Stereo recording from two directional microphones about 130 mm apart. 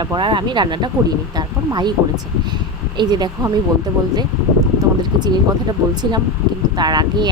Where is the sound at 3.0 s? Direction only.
35° right (ahead or behind).